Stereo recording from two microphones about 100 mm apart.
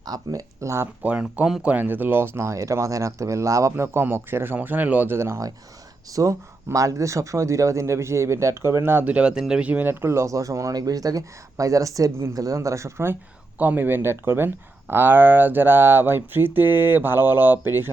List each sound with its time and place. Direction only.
0.0 s speech: 40° right (ahead or behind)
1.0 s speech: 15° right (ahead or behind)